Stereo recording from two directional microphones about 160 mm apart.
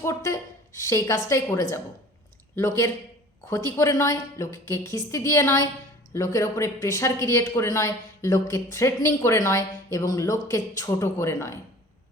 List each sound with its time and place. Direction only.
0.0 s speech: 20° left (ahead or behind)